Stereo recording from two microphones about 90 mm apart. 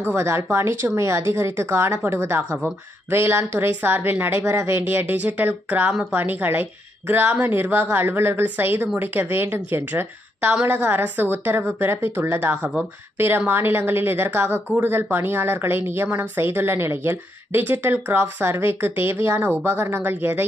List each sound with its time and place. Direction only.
0.1 s speech: 30° right (ahead or behind)